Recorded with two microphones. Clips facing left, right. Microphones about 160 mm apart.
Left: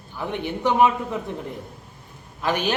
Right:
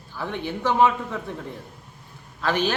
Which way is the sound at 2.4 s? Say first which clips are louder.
Even; 15° left (ahead or behind).